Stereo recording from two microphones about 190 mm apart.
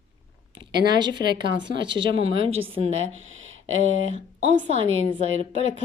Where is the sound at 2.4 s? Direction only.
90° right.